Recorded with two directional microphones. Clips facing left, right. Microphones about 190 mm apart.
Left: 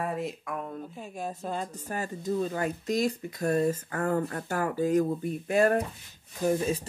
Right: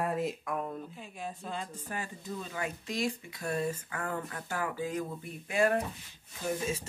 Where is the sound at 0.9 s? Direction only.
45° left (ahead or behind).